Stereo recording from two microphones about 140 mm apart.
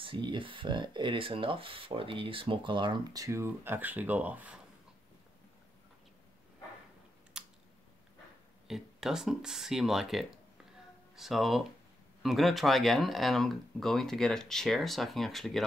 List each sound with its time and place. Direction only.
0.0 s speech: 35° right (ahead or behind); by 4.6 s 10° right (ahead or behind)
7.3 s a sound: 5° right (ahead or behind)
8.6 s speech: 5° right (ahead or behind)